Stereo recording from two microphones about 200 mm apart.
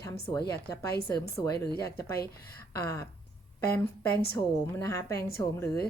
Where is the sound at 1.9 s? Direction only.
50° left (ahead or behind).